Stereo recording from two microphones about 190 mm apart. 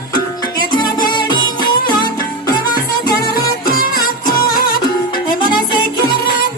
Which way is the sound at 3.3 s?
50° left (ahead or behind).